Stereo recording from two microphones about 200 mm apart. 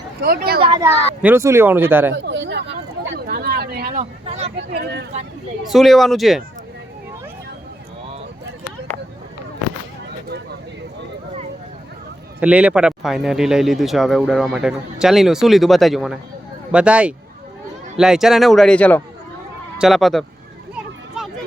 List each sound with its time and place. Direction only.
0.2 s speech: 50° right (ahead or behind)
1.2 s speech: 10° right (ahead or behind)
2.1 s a sound: 65° right (ahead or behind); by 4.5 s 35° right (ahead or behind)
4.5 s speech: 55° right (ahead or behind)
5.7 s speech: centre (ahead or behind)
12.4 s speech: 5° right (ahead or behind)